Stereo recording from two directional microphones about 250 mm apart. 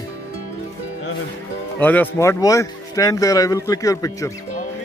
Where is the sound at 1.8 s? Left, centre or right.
Centre.